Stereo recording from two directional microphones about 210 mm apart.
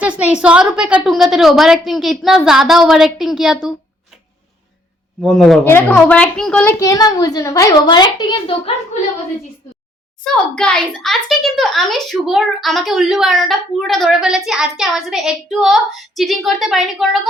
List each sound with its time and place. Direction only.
0.0 s speech: 5° right (ahead or behind)
5.2 s a woman's voice: centre (ahead or behind); by 8.7 s 25° left (ahead or behind)
10.5 s speech: 5° left (ahead or behind)